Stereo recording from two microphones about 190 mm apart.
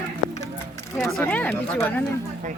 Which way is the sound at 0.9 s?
5° left (ahead or behind).